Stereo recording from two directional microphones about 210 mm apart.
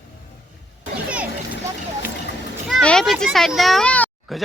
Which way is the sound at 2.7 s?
5° left (ahead or behind).